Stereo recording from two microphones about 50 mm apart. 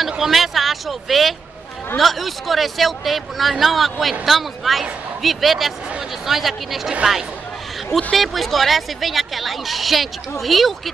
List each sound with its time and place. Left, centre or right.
0.0 s vehicle: centre
2.0 s speech: centre
7.0 s speech: centre
7.9 s speech: centre